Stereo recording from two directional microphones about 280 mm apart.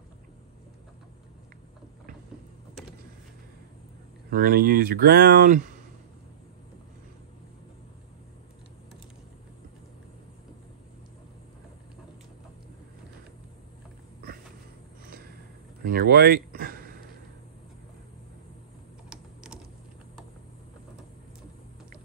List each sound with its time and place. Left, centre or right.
4.3 s speech: right
15.8 s a sound: right
19.0 s typing: centre